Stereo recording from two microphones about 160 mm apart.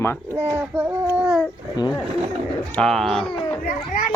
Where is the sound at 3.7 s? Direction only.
55° left (ahead or behind).